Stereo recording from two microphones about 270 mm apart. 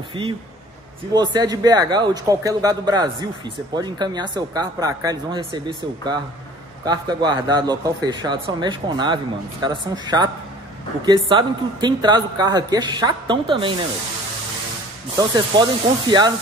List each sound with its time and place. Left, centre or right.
0.2 s speech: centre
15.1 s speech: centre